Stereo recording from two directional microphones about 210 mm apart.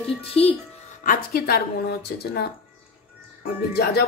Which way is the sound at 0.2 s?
25° left (ahead or behind).